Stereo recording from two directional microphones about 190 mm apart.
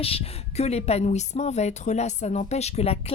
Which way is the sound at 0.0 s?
30° left (ahead or behind).